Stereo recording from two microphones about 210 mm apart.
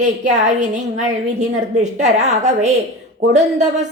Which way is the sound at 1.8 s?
35° right (ahead or behind).